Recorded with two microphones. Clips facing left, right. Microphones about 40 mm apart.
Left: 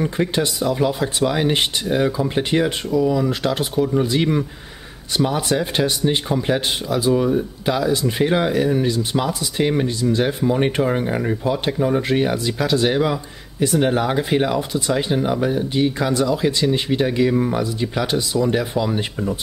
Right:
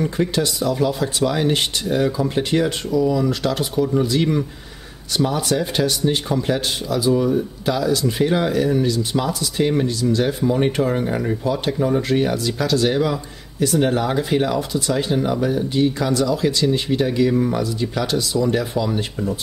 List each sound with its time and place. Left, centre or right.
0.0 s speech: centre